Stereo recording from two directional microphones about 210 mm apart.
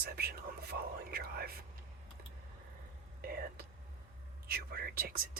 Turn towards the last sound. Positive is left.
turn(degrees=-45)  # may be behind; listen again after turning